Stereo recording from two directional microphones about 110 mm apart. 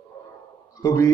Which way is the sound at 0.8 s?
30° left (ahead or behind).